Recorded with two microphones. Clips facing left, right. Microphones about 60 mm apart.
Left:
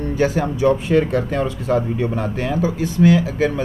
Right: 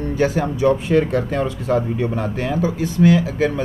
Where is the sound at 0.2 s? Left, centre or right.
Centre.